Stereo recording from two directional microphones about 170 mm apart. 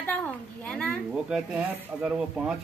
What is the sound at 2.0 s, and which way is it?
Speech, 5° right (ahead or behind).